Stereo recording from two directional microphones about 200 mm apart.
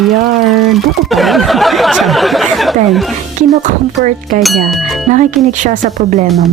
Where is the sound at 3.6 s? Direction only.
40° right (ahead or behind).